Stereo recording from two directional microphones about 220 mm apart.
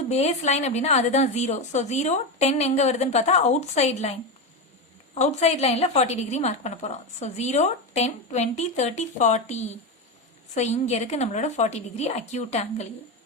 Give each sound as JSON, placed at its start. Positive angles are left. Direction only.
{"t": 0.1, "sound": "a woman's voice", "side_deg": 30}
{"t": 5.1, "sound": "a woman's voice", "side_deg": 30}